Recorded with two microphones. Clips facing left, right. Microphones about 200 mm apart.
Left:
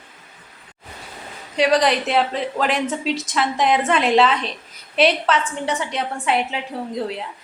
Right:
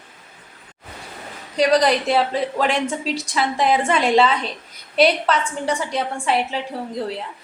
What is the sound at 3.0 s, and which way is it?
Speech, 30° right (ahead or behind).